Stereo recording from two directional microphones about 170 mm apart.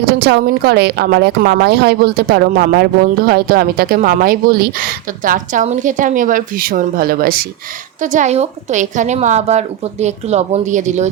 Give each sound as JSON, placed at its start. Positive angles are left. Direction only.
{"t": 0.2, "sound": "a woman's voice", "side_deg": -70}
{"t": 8.0, "sound": "a woman's voice", "side_deg": -45}